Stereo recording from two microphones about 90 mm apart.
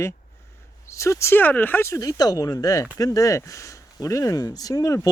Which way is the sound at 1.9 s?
40° left (ahead or behind).